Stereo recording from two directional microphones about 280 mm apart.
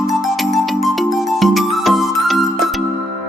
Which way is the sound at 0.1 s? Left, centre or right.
Centre.